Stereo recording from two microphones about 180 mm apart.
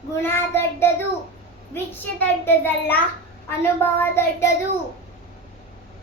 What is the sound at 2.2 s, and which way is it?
Child singing, 10° left (ahead or behind).